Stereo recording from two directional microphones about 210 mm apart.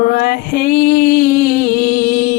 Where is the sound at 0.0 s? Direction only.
45° left (ahead or behind).